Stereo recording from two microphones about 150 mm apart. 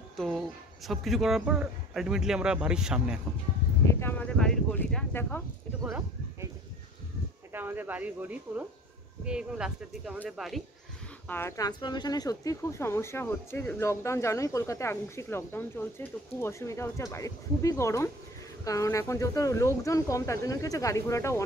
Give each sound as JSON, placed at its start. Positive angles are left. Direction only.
{"t": 0.8, "sound": "speech", "side_deg": 0}
{"t": 3.8, "sound": "a sound", "side_deg": 15}
{"t": 7.5, "sound": "speech", "side_deg": -15}
{"t": 11.2, "sound": "speech", "side_deg": 15}